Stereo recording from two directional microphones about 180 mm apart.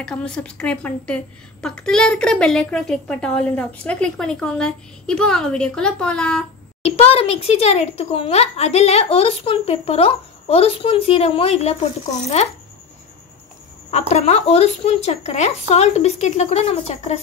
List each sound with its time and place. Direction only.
0.0 s a woman's voice: 5° left (ahead or behind)
7.0 s a woman's voice: 35° left (ahead or behind)
13.8 s a woman's voice: 35° left (ahead or behind)